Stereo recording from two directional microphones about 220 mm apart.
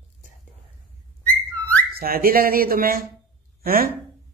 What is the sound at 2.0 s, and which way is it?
Speech, 45° right (ahead or behind).